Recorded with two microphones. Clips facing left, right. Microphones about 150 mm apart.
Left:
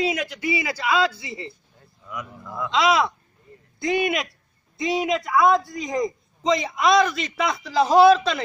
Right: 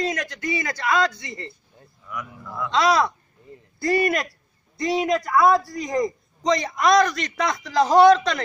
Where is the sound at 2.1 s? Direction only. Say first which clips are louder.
Even; 20° left (ahead or behind).